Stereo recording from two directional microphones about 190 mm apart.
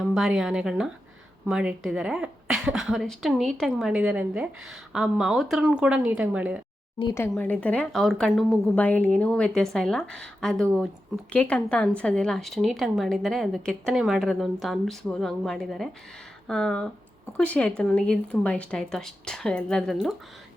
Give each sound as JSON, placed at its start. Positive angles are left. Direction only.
{"t": 0.0, "sound": "speech", "side_deg": -5}
{"t": 7.3, "sound": "speech", "side_deg": 10}